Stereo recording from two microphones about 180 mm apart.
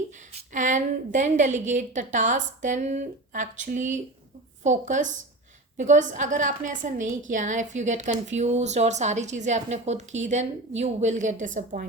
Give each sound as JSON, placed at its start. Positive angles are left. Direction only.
{"t": 0.3, "sound": "a woman's voice", "side_deg": -45}